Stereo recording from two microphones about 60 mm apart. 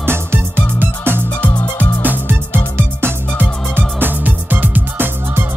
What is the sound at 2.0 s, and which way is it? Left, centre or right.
Music, right.